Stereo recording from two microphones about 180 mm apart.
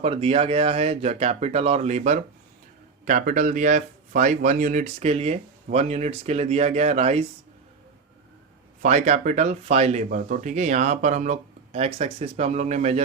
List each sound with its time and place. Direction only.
0.0 s speech: 30° right (ahead or behind)
8.8 s speech: 40° right (ahead or behind)